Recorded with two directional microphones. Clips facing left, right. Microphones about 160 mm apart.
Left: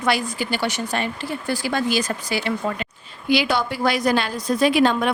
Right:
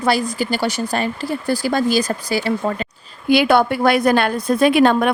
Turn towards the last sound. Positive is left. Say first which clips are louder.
# right 4 dB
turn(degrees=-55)  # may be behind; listen again after turning